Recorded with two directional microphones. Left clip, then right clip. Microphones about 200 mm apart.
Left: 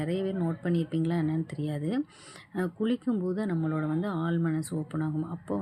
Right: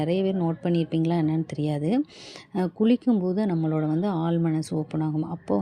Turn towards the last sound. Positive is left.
turn(degrees=-25)  # may be behind; listen again after turning